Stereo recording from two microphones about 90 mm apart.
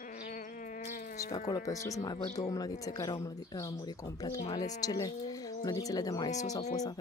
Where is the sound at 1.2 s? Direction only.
40° left (ahead or behind).